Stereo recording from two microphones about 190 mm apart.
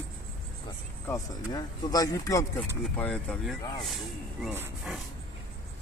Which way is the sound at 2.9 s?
5° left (ahead or behind).